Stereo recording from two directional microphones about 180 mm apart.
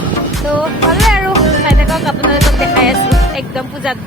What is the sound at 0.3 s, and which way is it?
Music, centre (ahead or behind).